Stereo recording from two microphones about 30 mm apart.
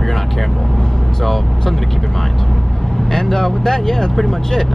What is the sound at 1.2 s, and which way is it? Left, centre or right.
Speech, centre.